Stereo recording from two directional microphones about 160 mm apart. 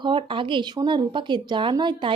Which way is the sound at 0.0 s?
30° right (ahead or behind).